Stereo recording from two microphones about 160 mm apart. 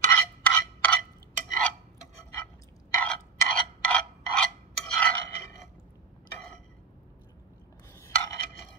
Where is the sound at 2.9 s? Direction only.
10° left (ahead or behind).